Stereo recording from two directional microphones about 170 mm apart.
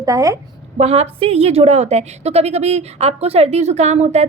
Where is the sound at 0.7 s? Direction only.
40° right (ahead or behind).